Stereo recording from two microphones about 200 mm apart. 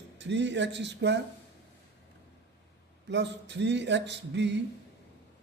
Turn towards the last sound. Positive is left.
turn(degrees=-60)  # may be behind; listen again after turning